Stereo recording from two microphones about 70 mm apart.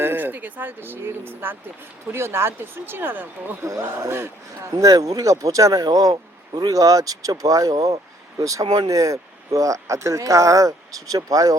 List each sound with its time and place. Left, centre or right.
0.0 s speech: right
4.7 s speech: right